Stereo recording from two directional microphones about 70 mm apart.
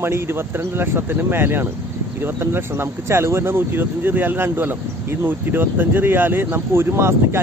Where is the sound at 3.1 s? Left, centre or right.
Right.